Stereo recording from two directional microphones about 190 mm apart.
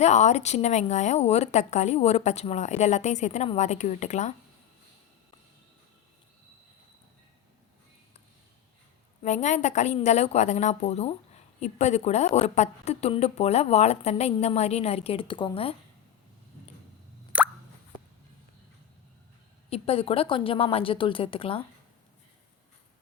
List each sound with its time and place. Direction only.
0.0 s a woman's voice: 40° left (ahead or behind)
9.2 s a woman's voice: 40° left (ahead or behind)
17.3 s plop: 5° right (ahead or behind)
19.7 s a woman's voice: 30° left (ahead or behind)